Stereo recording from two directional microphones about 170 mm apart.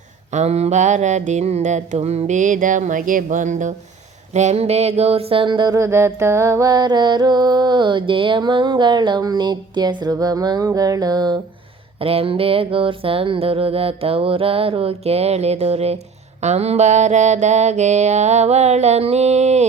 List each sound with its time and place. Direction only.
0.3 s mantra: 40° right (ahead or behind); by 11.3 s 25° right (ahead or behind)
11.9 s music: 35° right (ahead or behind)